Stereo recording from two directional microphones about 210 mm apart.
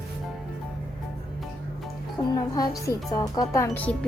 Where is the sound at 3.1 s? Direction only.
15° left (ahead or behind).